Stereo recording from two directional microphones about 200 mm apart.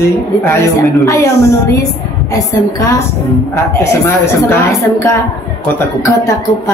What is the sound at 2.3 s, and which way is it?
Speech, 15° left (ahead or behind).